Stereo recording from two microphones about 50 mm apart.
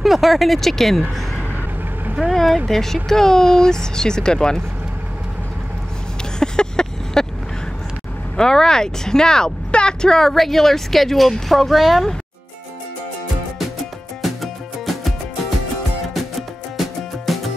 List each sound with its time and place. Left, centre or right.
0.0 s speech: centre
2.3 s speech: centre
6.4 s vehicle: centre
8.4 s speech: centre
14.2 s music: centre
16.2 s music: centre